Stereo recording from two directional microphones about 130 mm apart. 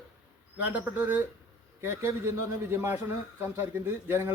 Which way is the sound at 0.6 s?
10° right (ahead or behind).